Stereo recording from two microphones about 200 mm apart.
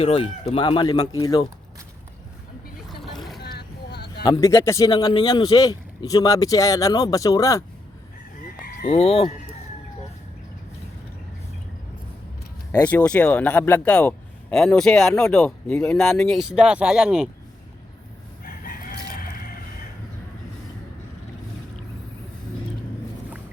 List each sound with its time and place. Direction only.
0.0 s speech: 30° left (ahead or behind)
3.0 s vehicle: centre (ahead or behind)
3.4 s vehicle: 55° left (ahead or behind)
4.2 s speech: 20° left (ahead or behind)
8.9 s speech: 30° left (ahead or behind)
12.7 s speech: 5° left (ahead or behind)
18.4 s chicken: 45° left (ahead or behind)